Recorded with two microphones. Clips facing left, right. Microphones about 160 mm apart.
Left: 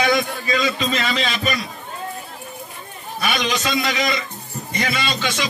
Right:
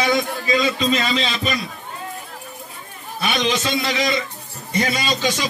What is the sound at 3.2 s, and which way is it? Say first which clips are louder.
Speech: right 1 dB; 25° right (ahead or behind).